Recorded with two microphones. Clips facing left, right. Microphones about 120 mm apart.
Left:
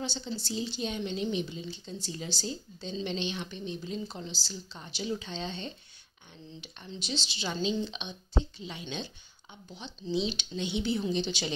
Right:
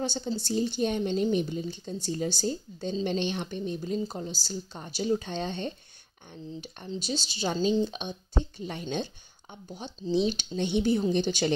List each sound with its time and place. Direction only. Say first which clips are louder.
0.0 s a woman's voice: right 5 dB; 45° right (ahead or behind)